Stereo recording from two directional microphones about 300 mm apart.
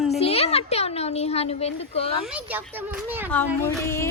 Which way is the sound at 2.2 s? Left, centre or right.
Centre.